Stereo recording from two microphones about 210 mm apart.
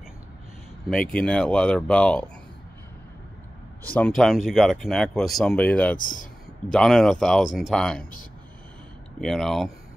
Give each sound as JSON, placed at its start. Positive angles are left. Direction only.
{"t": 0.8, "sound": "speech", "side_deg": 5}
{"t": 3.8, "sound": "speech", "side_deg": 5}
{"t": 5.9, "sound": "speech", "side_deg": 40}
{"t": 6.7, "sound": "speech", "side_deg": 0}
{"t": 9.2, "sound": "speech", "side_deg": 0}